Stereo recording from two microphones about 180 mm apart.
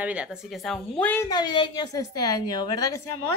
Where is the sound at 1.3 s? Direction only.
25° left (ahead or behind).